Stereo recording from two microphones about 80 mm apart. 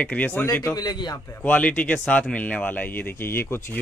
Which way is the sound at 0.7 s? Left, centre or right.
Left.